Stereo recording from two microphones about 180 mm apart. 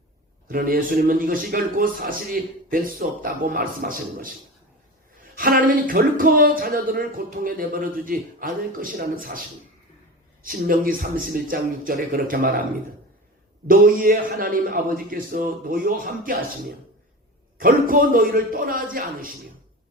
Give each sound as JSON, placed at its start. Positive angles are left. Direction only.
{"t": 0.4, "sound": "speech", "side_deg": -50}
{"t": 5.4, "sound": "speech", "side_deg": -50}
{"t": 10.4, "sound": "speech", "side_deg": -50}
{"t": 13.7, "sound": "speech", "side_deg": -50}
{"t": 17.6, "sound": "speech", "side_deg": -50}